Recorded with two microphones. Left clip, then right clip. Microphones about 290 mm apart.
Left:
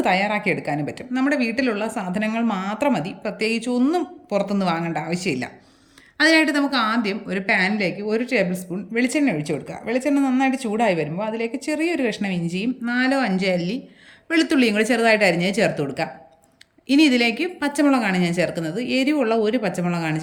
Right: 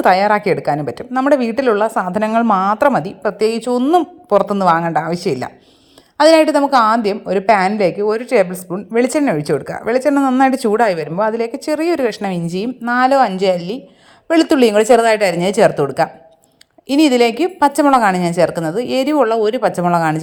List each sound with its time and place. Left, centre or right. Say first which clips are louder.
0.0 s a woman's voice: right 8 dB; centre
8.7 s speech: right 7 dB; right
9.0 s speech: right 2 dB; centre
9.5 s speech: right 9 dB; right
9.9 s speech: right 7 dB; centre
10.2 s speech: right 7 dB; right
10.4 s speech: right 8 dB; centre